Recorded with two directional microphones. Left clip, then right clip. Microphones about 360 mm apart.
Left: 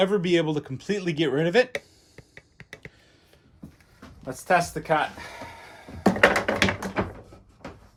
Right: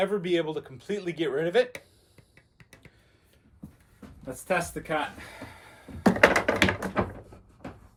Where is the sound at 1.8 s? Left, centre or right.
Centre.